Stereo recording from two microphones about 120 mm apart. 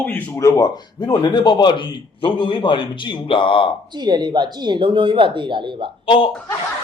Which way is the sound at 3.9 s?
35° right (ahead or behind).